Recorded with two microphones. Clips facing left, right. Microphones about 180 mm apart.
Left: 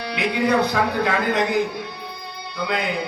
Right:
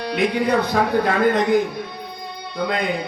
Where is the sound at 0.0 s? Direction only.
50° right (ahead or behind).